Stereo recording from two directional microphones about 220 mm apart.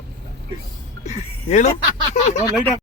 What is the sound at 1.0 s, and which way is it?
Speech, 30° left (ahead or behind).